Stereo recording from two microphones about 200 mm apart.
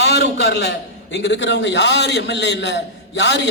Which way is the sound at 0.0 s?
55° left (ahead or behind).